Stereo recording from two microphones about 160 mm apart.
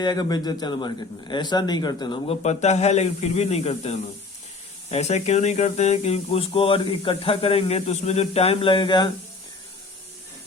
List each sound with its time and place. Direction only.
0.0 s a man's voice: 25° left (ahead or behind)